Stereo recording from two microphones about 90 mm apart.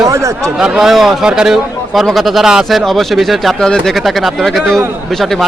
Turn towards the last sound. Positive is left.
turn(degrees=0)  # may be behind; listen again after turning